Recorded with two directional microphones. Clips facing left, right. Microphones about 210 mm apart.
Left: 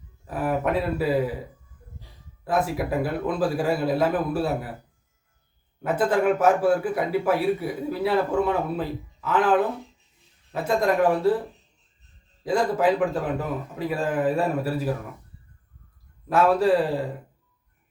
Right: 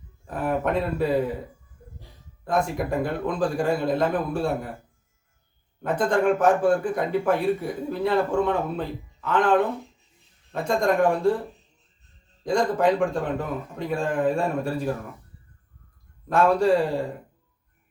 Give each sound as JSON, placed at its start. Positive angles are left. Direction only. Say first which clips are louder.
{"t": 0.3, "sound": "a man's voice", "louder": "even", "side_deg": 5}
{"t": 2.4, "sound": "a man's voice", "louder": "even", "side_deg": 5}
{"t": 5.8, "sound": "a man's voice", "louder": "even", "side_deg": 5}
{"t": 12.4, "sound": "a man's voice", "louder": "even", "side_deg": 5}
{"t": 16.3, "sound": "a man's voice", "louder": "even", "side_deg": 5}